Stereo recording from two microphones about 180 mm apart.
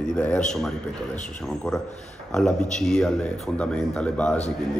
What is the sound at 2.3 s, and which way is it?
A man's voice, 5° left (ahead or behind).